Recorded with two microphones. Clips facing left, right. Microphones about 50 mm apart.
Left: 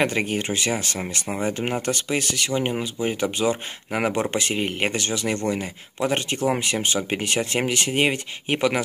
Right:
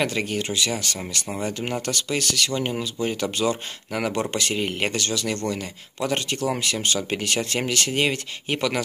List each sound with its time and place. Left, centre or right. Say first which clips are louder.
0.0 s speech: left 2 dB; left